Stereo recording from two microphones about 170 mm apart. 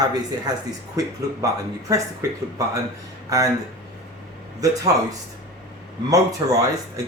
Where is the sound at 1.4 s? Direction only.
20° right (ahead or behind).